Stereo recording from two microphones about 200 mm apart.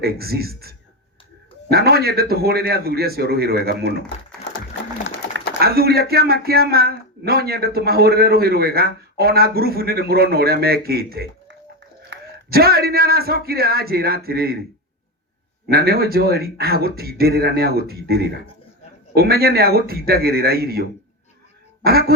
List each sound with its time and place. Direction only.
0.0 s speech: 50° right (ahead or behind)
5.3 s speech: 50° right (ahead or behind)
15.7 s speech: 50° right (ahead or behind)
21.8 s speech: 50° right (ahead or behind)